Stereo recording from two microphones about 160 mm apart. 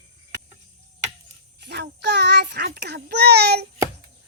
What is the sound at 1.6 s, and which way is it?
A child's voice, 90° right.